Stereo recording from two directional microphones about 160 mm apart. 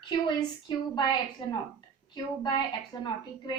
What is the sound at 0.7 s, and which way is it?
Speech, 25° left (ahead or behind).